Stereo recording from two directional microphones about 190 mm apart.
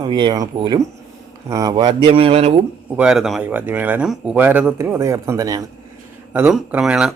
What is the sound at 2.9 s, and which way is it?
Speech, 5° right (ahead or behind).